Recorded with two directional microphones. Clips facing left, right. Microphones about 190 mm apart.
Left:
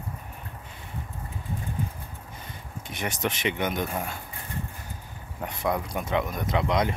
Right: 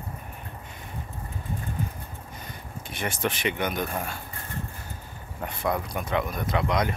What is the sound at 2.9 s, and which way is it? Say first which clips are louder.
Speech: right 1 dB; 20° left (ahead or behind).